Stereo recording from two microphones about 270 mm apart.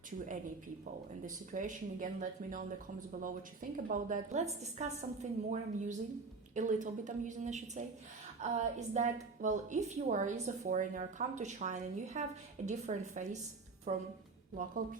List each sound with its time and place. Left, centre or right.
1.2 s a woman's voice: right
3.1 s a woman's voice: right